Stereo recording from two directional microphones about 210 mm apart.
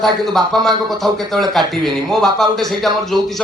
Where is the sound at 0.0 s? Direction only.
Centre (ahead or behind).